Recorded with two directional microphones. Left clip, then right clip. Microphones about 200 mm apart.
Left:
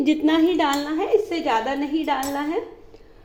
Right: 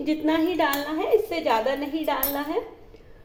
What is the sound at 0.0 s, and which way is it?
Speech, 50° left (ahead or behind).